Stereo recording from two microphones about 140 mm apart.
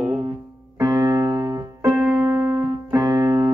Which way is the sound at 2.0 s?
15° right (ahead or behind).